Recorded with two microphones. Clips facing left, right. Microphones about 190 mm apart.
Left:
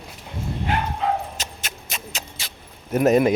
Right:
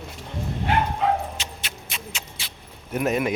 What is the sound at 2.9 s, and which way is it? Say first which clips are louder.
Speech: left 7 dB; 40° left (ahead or behind).